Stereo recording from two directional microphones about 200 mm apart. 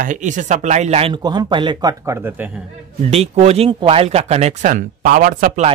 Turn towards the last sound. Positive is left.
turn(degrees=-40)  # may be behind; listen again after turning